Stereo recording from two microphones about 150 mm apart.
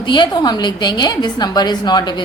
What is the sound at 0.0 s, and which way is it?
A woman's voice, 30° left (ahead or behind).